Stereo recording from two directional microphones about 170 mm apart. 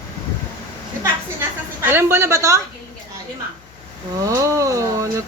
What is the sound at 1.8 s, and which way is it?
Speech, 15° right (ahead or behind).